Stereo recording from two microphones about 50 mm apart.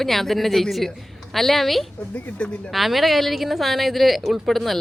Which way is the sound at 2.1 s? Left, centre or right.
Left.